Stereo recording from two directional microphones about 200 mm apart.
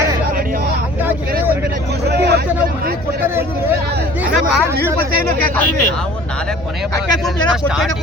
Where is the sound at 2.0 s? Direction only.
55° right (ahead or behind).